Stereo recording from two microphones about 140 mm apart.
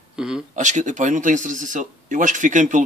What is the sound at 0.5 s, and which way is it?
Speech, 60° right (ahead or behind).